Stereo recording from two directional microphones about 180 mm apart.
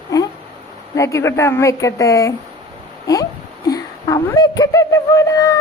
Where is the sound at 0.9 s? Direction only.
15° left (ahead or behind).